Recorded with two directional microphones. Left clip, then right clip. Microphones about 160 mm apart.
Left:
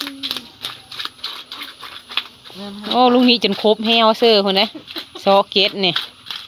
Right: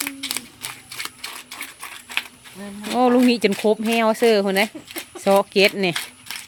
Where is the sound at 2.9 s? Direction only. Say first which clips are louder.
Left 4 dB; 10° right (ahead or behind).